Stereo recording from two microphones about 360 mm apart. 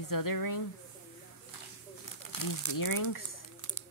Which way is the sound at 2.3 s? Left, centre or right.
Left.